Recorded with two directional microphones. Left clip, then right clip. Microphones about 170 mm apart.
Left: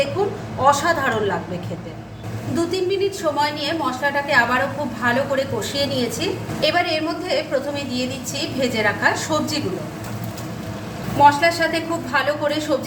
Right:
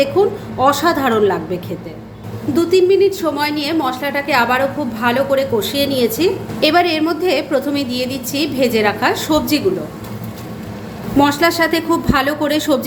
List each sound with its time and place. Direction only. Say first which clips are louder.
0.6 s a woman's voice: right 3 dB; 50° right (ahead or behind)
2.6 s a woman's voice: right 9 dB; 40° right (ahead or behind)
11.2 s a woman's voice: right 1 dB; 70° right (ahead or behind)